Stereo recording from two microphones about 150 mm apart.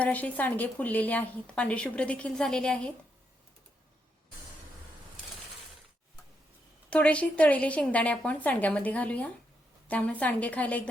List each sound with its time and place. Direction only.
0.0 s speech: 10° left (ahead or behind)
6.9 s speech: 10° left (ahead or behind)